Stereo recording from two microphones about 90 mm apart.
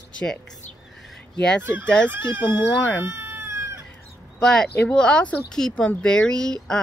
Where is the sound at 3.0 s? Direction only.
25° right (ahead or behind).